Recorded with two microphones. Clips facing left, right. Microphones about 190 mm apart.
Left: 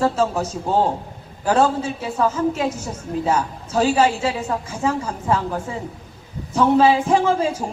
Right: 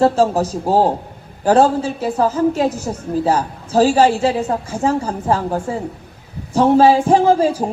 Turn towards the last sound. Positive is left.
turn(degrees=-35)  # may be behind; listen again after turning